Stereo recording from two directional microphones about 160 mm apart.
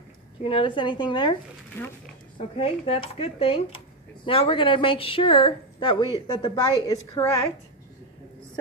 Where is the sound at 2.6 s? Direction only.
35° left (ahead or behind).